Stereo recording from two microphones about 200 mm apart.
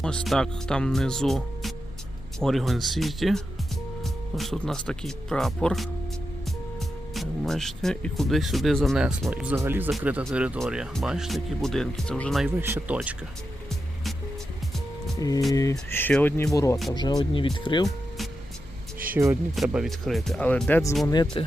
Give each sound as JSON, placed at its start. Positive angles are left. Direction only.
{"t": 0.0, "sound": "speech", "side_deg": 5}
{"t": 12.5, "sound": "speech", "side_deg": -10}
{"t": 15.2, "sound": "speech", "side_deg": 15}
{"t": 19.1, "sound": "speech", "side_deg": -10}
{"t": 21.1, "sound": "speech", "side_deg": 20}